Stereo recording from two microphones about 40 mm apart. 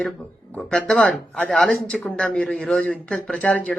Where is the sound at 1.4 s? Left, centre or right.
Left.